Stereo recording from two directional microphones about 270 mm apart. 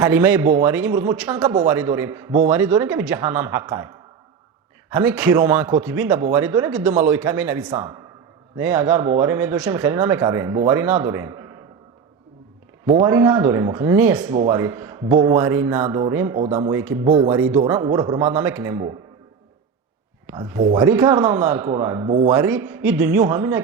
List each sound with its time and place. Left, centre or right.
0.0 s speech: centre
1.4 s speech: centre
12.9 s speech: centre
20.2 s speech: centre